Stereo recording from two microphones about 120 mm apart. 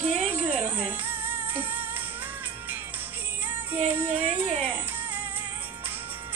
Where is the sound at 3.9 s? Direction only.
15° right (ahead or behind).